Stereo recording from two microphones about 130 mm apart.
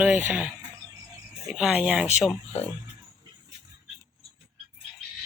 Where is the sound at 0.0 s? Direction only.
10° right (ahead or behind).